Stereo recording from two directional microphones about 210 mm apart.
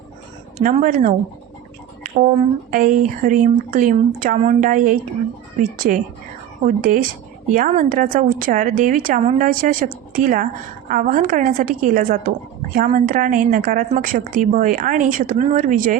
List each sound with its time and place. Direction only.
0.6 s a woman's voice: 35° right (ahead or behind)
2.1 s a woman's voice: 35° right (ahead or behind)
6.7 s a woman's voice: 40° right (ahead or behind)